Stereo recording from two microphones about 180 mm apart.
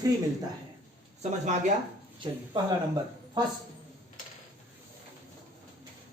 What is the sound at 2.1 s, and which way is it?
Speech, 25° right (ahead or behind).